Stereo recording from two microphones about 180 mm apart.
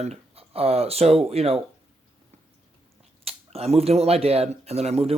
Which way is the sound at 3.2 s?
35° right (ahead or behind).